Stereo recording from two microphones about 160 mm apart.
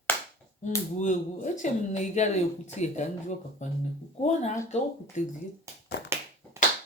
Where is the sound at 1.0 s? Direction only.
50° left (ahead or behind).